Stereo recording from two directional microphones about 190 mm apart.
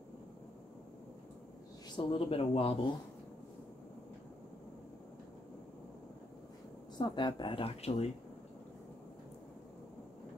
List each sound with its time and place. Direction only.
2.0 s speech: 30° left (ahead or behind)
7.0 s speech: 25° left (ahead or behind)